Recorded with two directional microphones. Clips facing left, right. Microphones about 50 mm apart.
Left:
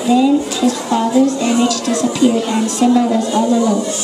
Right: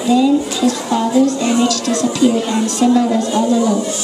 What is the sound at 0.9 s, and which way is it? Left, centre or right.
Speech, left.